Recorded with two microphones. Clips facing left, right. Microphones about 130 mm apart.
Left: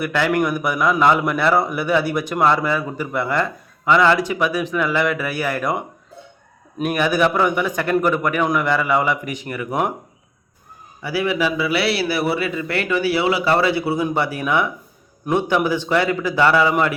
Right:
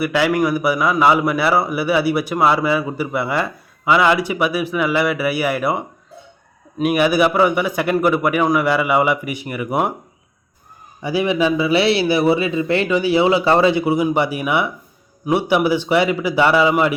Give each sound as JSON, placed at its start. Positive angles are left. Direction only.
{"t": 0.0, "sound": "a man's voice", "side_deg": -10}
{"t": 6.8, "sound": "a man's voice", "side_deg": -10}
{"t": 11.0, "sound": "a man's voice", "side_deg": -20}